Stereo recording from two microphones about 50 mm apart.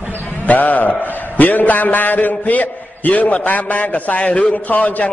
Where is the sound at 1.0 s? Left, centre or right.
Left.